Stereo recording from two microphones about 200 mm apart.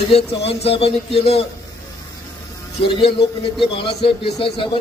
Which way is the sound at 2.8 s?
30° left (ahead or behind).